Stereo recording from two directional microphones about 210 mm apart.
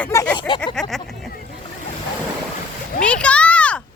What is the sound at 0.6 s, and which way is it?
Speech, centre (ahead or behind).